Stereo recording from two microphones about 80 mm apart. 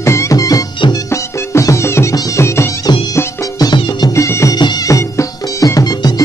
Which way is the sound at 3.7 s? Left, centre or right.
Left.